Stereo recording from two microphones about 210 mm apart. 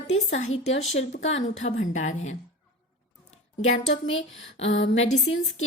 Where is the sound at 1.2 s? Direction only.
65° left (ahead or behind).